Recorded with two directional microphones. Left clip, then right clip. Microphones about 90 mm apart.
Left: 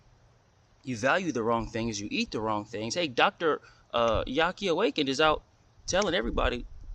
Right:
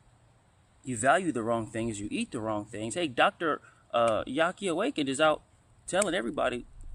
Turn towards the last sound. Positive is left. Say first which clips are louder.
# left 1 dB
turn(degrees=45)  # may be behind; listen again after turning